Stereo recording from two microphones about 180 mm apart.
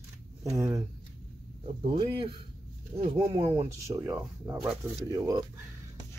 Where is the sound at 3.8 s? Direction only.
15° right (ahead or behind).